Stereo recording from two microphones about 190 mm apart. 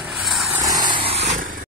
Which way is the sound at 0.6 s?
20° right (ahead or behind).